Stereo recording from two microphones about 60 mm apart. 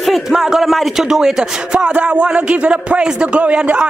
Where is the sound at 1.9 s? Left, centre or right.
Right.